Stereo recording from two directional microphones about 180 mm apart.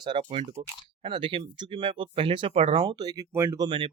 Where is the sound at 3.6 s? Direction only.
30° right (ahead or behind).